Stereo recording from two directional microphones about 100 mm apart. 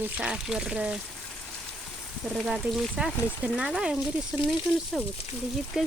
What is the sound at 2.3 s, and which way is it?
Speech, 5° right (ahead or behind).